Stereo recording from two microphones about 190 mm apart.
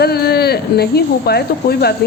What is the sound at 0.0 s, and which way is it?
A woman's voice, 55° left (ahead or behind).